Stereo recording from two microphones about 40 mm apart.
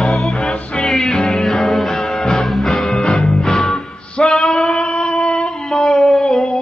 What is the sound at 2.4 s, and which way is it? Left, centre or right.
Music, centre.